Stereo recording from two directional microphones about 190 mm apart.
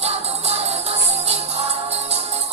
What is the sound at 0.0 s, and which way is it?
Music, 35° right (ahead or behind).